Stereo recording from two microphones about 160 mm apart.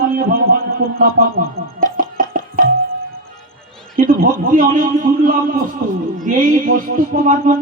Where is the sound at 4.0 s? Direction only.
65° right (ahead or behind).